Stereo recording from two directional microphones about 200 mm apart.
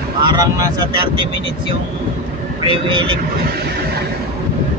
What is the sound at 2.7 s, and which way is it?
Speech, 25° right (ahead or behind).